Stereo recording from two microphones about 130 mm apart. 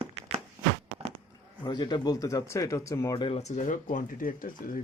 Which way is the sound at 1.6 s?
35° left (ahead or behind).